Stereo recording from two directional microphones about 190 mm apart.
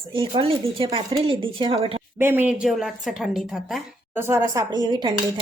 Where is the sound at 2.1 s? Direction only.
10° right (ahead or behind).